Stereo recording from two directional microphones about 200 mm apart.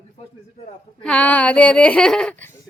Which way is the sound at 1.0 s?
5° left (ahead or behind).